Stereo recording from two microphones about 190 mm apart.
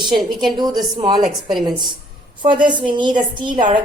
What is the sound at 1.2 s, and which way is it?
Speech, centre (ahead or behind).